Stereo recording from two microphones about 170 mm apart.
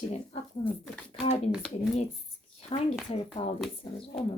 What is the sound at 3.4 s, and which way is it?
Speech, 30° left (ahead or behind).